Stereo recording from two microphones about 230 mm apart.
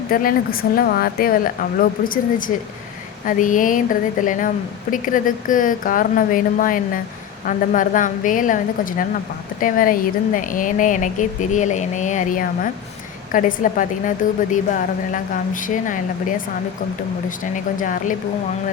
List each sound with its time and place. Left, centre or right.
0.1 s a woman's voice: left
17.7 s a woman's voice: left